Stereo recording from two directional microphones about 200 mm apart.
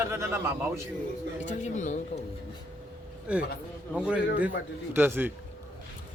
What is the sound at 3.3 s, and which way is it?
A man's voice, 5° right (ahead or behind).